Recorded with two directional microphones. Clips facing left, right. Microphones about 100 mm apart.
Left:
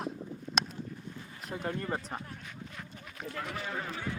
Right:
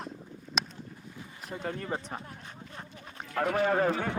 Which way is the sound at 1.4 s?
Centre (ahead or behind).